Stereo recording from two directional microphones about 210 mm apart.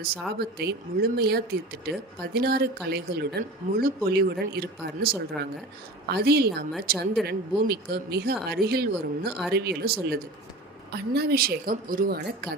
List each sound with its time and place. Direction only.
0.3 s speech: 50° right (ahead or behind)